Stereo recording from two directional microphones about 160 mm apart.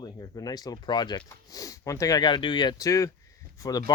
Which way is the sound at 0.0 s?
25° left (ahead or behind).